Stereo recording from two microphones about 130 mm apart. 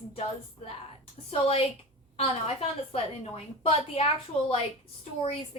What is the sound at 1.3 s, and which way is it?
A woman's voice, 50° left (ahead or behind).